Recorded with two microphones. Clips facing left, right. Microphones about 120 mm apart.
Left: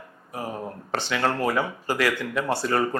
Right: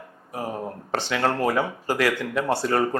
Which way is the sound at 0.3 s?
45° right (ahead or behind).